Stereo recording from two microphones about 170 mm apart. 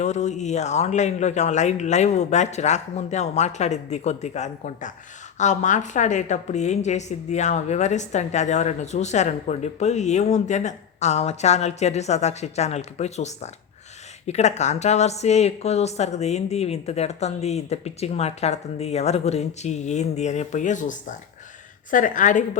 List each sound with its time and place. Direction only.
0.0 s a woman's voice: 45° left (ahead or behind)